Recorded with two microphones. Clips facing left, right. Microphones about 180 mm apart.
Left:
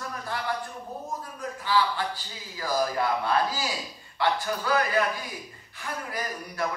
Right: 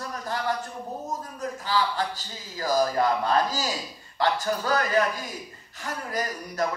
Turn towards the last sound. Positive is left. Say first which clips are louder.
# right 4 dB
turn(degrees=-40)  # may be behind; listen again after turning